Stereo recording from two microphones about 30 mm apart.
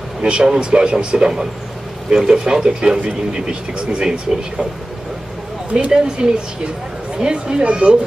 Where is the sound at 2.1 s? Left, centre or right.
Centre.